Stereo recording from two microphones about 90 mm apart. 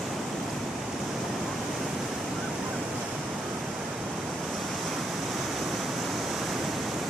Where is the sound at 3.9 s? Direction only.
5° right (ahead or behind).